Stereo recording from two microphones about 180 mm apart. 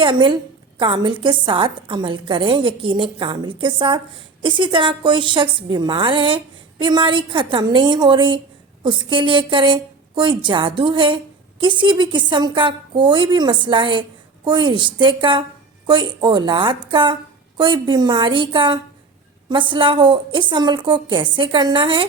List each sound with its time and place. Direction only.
0.0 s a woman's voice: 25° right (ahead or behind)